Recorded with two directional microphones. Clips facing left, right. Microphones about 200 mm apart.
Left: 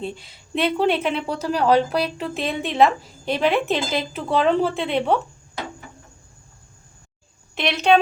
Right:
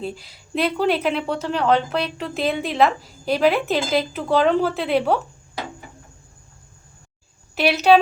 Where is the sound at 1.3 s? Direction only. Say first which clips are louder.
Left 2 dB; 35° left (ahead or behind).